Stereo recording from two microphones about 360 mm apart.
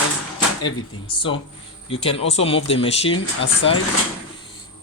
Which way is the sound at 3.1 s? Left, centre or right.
Left.